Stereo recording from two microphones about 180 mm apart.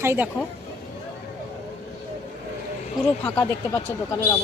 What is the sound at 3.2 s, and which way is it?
Speech, 15° left (ahead or behind).